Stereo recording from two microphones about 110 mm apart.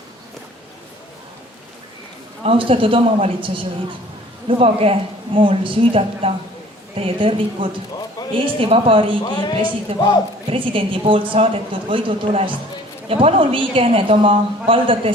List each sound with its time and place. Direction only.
2.4 s a woman's voice: 55° right (ahead or behind)
4.4 s a woman's voice: 60° right (ahead or behind)
9.2 s speech: 40° left (ahead or behind)
9.9 s a woman's voice: 60° right (ahead or behind)